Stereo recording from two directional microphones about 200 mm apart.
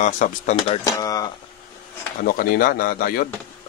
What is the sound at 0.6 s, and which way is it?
Speech, 20° left (ahead or behind).